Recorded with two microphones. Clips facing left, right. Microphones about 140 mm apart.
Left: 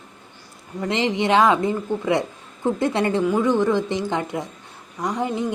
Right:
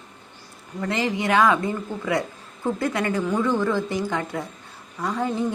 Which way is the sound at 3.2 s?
15° left (ahead or behind).